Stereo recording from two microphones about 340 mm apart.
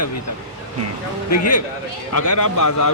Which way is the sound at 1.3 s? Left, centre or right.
Left.